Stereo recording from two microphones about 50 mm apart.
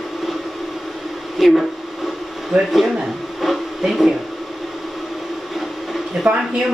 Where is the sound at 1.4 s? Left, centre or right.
Centre.